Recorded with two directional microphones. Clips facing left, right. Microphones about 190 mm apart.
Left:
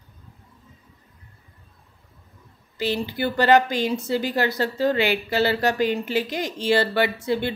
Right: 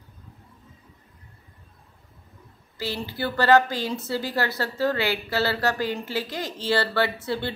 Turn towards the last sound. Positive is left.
turn(degrees=15)  # may be behind; listen again after turning